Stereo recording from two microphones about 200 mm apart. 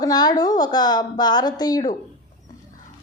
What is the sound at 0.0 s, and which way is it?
A woman's voice, 20° left (ahead or behind).